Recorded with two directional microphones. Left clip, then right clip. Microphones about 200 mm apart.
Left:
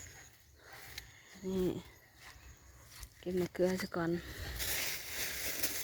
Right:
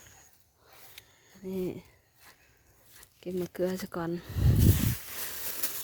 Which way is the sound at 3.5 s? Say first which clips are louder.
Right 1 dB; 25° right (ahead or behind).